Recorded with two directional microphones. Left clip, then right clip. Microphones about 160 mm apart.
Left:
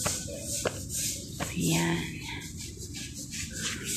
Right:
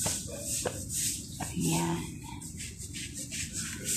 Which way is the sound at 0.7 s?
90° left.